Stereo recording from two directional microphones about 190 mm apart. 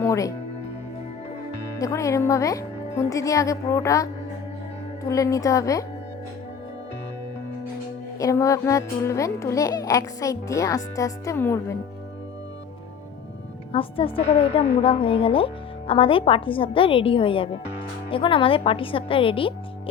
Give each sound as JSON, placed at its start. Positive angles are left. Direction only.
{"t": 0.0, "sound": "music", "side_deg": 15}
{"t": 1.8, "sound": "a child's voice", "side_deg": 15}
{"t": 8.2, "sound": "a child's voice", "side_deg": 15}
{"t": 13.7, "sound": "a woman's voice", "side_deg": 30}